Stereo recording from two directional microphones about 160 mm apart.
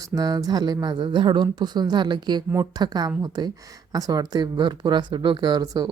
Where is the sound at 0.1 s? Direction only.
25° right (ahead or behind).